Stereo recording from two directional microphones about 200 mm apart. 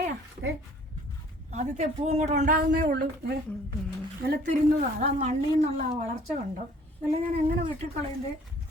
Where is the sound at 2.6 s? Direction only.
50° right (ahead or behind).